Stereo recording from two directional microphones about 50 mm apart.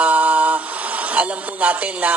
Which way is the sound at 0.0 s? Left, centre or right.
Right.